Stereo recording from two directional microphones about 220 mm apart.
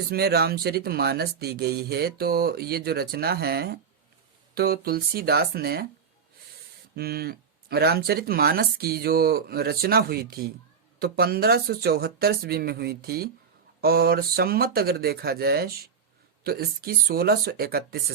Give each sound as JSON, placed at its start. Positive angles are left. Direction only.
{"t": 0.1, "sound": "speech", "side_deg": -45}
{"t": 6.9, "sound": "speech", "side_deg": -45}